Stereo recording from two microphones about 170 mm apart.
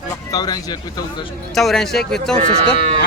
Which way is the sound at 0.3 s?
25° left (ahead or behind).